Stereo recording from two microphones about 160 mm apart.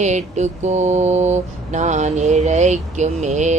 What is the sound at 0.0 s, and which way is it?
Mantra, 45° right (ahead or behind).